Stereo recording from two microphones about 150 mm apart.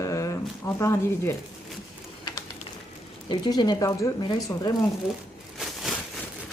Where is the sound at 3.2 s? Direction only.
30° left (ahead or behind).